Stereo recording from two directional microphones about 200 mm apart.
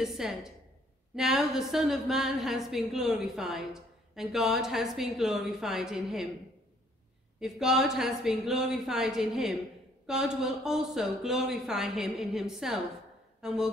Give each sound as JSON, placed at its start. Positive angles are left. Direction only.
{"t": 0.0, "sound": "a woman's voice", "side_deg": 0}
{"t": 7.3, "sound": "a woman's voice", "side_deg": 0}